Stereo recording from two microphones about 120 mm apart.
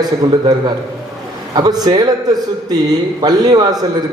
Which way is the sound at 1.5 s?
35° right (ahead or behind).